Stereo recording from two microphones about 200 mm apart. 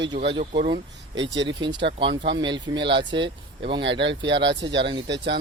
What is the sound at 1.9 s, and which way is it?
Speech, 25° right (ahead or behind).